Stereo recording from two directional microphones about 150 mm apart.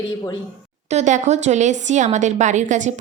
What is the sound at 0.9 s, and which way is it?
A woman's voice, 50° right (ahead or behind).